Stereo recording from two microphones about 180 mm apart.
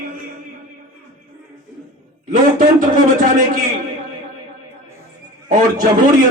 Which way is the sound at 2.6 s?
45° right (ahead or behind).